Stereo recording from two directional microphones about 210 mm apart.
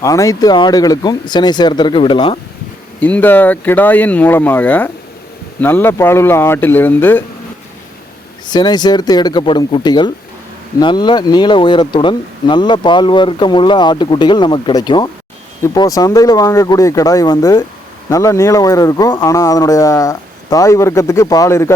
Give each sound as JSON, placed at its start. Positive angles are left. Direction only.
{"t": 0.0, "sound": "speech", "side_deg": 15}
{"t": 3.0, "sound": "speech", "side_deg": 10}
{"t": 8.4, "sound": "speech", "side_deg": 20}